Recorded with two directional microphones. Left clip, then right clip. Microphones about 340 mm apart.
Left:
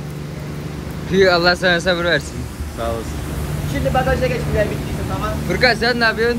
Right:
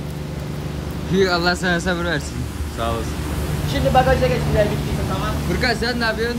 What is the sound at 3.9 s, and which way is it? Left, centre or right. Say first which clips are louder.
Speech: right 2 dB; right.